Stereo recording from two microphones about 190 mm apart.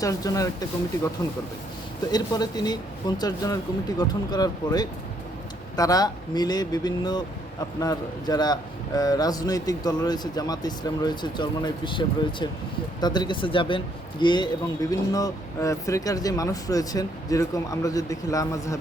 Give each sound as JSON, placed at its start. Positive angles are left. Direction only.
{"t": 0.0, "sound": "speech", "side_deg": 20}
{"t": 2.0, "sound": "speech", "side_deg": 20}